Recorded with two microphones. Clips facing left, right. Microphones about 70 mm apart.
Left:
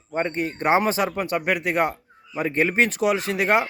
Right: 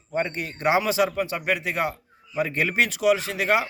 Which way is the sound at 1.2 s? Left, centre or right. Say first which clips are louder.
Left 2 dB; left.